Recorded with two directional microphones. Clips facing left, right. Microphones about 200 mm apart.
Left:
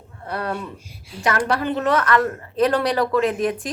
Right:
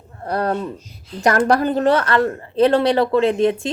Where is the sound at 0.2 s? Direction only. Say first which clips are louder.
Right 6 dB; 40° right (ahead or behind).